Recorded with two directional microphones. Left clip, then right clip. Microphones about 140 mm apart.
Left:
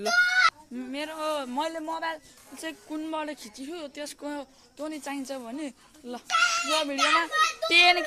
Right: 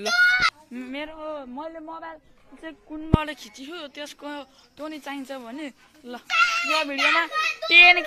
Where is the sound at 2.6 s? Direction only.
20° left (ahead or behind).